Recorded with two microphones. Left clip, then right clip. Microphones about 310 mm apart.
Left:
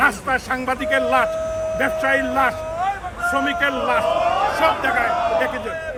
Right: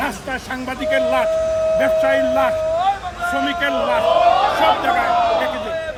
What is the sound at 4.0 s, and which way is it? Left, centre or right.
A man's voice, right.